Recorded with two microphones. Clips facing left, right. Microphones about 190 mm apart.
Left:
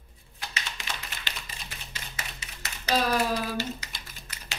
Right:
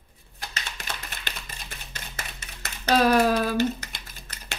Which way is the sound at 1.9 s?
55° right (ahead or behind).